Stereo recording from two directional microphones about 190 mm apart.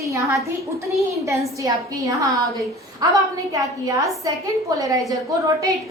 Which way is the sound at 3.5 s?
15° right (ahead or behind).